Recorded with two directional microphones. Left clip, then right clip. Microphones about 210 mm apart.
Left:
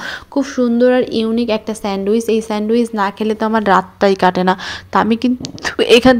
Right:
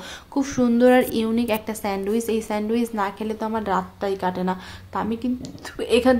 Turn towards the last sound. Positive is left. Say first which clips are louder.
# left 9 dB
turn(degrees=30)  # may be behind; listen again after turning